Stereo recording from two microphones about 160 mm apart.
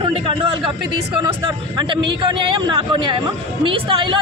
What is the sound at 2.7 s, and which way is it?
Speech, 30° right (ahead or behind).